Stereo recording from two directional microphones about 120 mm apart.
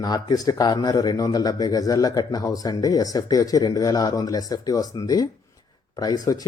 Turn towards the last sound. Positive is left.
turn(degrees=30)  # may be behind; listen again after turning